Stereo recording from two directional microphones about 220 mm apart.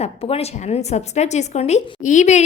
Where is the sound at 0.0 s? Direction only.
30° left (ahead or behind).